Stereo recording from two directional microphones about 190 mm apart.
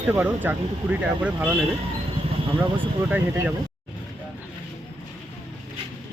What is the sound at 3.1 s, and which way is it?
Speech, 10° right (ahead or behind).